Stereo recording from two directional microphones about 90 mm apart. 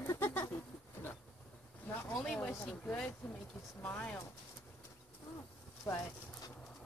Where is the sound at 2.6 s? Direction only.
15° left (ahead or behind).